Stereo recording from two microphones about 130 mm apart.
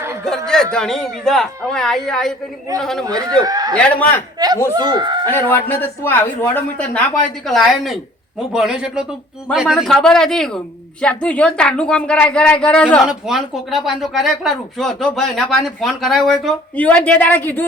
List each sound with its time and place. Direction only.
0.3 s a woman's voice: 5° left (ahead or behind)
3.4 s a man's voice: 30° right (ahead or behind)
3.8 s speech: 10° left (ahead or behind)
4.7 s speech: 35° right (ahead or behind)
5.3 s speech: 15° left (ahead or behind)
7.4 s a woman's voice: centre (ahead or behind)
16.7 s speech: 10° left (ahead or behind)